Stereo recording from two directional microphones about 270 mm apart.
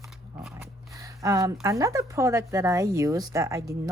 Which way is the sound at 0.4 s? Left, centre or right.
Centre.